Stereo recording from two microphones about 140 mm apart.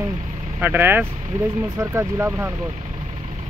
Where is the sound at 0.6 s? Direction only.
15° right (ahead or behind).